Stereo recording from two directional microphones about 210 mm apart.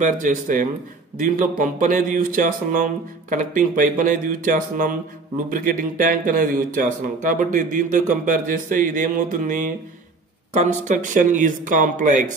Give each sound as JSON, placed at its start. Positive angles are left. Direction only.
{"t": 0.0, "sound": "speech", "side_deg": -40}